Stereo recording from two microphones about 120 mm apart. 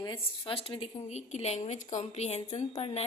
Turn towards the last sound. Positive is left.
turn(degrees=55)  # may be behind; listen again after turning